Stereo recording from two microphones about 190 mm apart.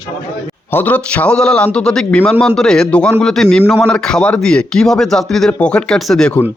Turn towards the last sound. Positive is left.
turn(degrees=5)  # may be behind; listen again after turning